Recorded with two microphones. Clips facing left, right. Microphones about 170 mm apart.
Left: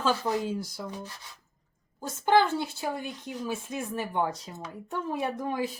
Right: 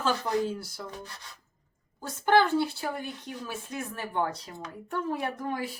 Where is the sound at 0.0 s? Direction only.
15° left (ahead or behind).